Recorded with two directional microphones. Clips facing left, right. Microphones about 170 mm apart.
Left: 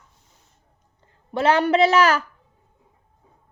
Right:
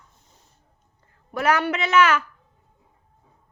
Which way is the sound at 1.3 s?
30° left (ahead or behind).